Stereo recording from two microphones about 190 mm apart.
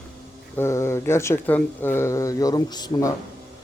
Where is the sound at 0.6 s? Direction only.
15° left (ahead or behind).